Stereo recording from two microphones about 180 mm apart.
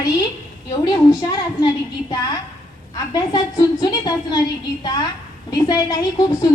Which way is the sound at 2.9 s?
20° left (ahead or behind).